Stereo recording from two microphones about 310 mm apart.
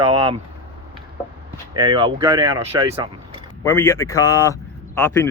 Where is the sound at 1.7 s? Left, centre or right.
Centre.